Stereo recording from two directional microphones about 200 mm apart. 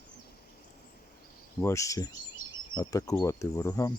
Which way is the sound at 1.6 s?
15° left (ahead or behind).